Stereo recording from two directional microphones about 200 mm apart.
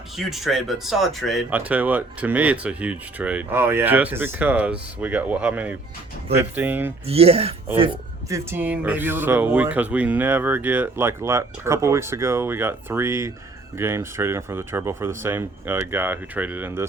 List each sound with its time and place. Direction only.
0.2 s speech: centre (ahead or behind)
7.1 s speech: 30° right (ahead or behind)
8.3 s speech: 10° right (ahead or behind)